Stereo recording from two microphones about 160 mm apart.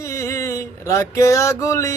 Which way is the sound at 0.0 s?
20° left (ahead or behind).